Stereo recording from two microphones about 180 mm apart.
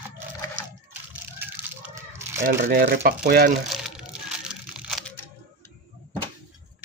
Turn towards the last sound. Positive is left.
turn(degrees=-5)  # may be behind; listen again after turning